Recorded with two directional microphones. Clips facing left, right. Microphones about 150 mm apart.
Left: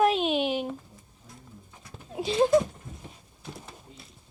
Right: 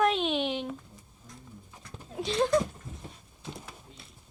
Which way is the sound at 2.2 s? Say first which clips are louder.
Left 4 dB; 5° left (ahead or behind).